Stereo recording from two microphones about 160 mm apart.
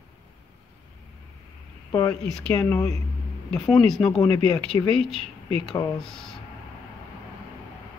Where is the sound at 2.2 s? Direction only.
5° left (ahead or behind).